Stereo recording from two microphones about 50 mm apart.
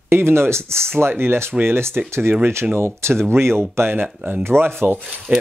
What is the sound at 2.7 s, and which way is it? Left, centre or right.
Speech, right.